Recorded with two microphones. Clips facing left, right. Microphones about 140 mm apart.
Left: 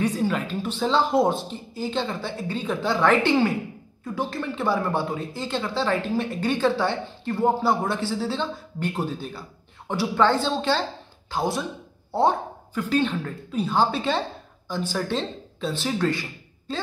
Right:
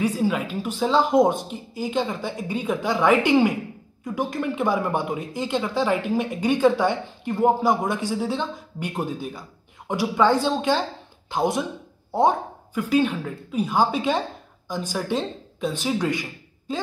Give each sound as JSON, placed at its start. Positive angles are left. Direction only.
{"t": 0.0, "sound": "speech", "side_deg": -10}